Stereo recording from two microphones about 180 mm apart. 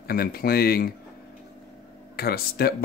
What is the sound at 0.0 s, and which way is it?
Speech, 55° left (ahead or behind).